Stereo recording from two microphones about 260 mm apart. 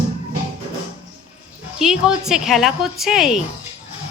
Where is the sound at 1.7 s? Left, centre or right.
Centre.